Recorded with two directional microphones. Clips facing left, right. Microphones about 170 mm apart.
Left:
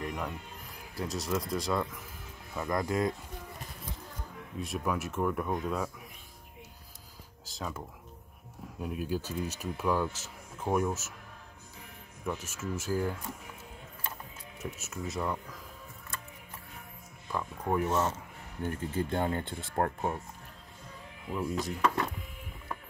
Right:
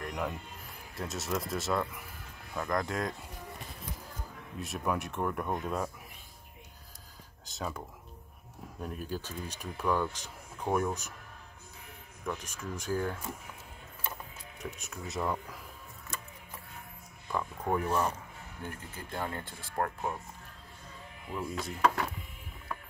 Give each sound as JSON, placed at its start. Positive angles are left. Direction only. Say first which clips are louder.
{"t": 0.0, "sound": "music", "louder": "even", "side_deg": 0}
{"t": 0.9, "sound": "speech", "louder": "left 2 dB", "side_deg": 0}
{"t": 4.6, "sound": "speech", "louder": "even", "side_deg": 0}
{"t": 7.4, "sound": "speech", "louder": "right 1 dB", "side_deg": 0}
{"t": 8.8, "sound": "speech", "louder": "left 4 dB", "side_deg": 5}
{"t": 12.3, "sound": "speech", "louder": "left 2 dB", "side_deg": 5}
{"t": 14.6, "sound": "speech", "louder": "left 3 dB", "side_deg": 5}
{"t": 17.3, "sound": "speech", "louder": "even", "side_deg": 0}
{"t": 17.8, "sound": "speech", "louder": "left 1 dB", "side_deg": 20}
{"t": 19.1, "sound": "speech", "louder": "left 6 dB", "side_deg": 25}
{"t": 21.4, "sound": "speech", "louder": "even", "side_deg": 0}